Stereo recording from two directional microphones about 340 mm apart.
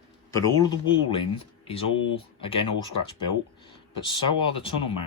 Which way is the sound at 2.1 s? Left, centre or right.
Centre.